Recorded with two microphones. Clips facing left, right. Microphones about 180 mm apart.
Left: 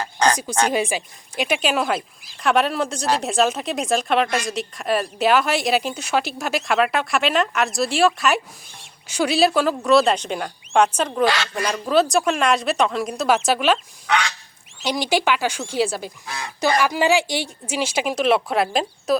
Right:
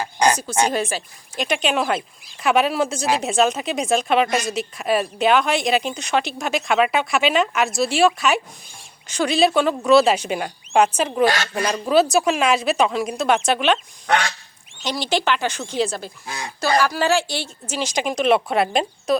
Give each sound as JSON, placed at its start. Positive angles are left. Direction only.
{"t": 0.0, "sound": "a sound", "side_deg": -10}
{"t": 0.7, "sound": "speech", "side_deg": 10}
{"t": 14.1, "sound": "goose", "side_deg": -45}
{"t": 14.8, "sound": "speech", "side_deg": 10}
{"t": 16.2, "sound": "speech", "side_deg": -20}
{"t": 16.6, "sound": "speech", "side_deg": 20}